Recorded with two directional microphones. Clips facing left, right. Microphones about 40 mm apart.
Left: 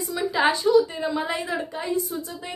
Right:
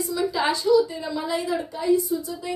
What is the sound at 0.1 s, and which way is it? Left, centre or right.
A woman's voice, left.